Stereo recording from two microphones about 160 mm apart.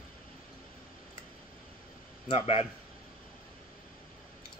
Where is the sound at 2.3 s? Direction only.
40° left (ahead or behind).